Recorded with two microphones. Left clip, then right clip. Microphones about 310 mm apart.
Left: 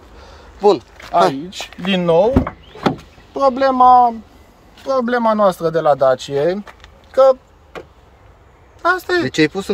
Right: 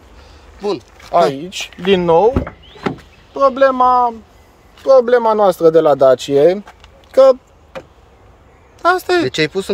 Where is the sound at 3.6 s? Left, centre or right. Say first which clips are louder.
Left 3 dB; centre.